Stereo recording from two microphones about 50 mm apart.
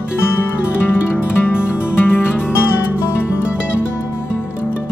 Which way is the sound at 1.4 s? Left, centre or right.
Left.